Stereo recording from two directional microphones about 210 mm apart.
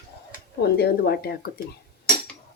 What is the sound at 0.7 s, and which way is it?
Speech, 50° left (ahead or behind).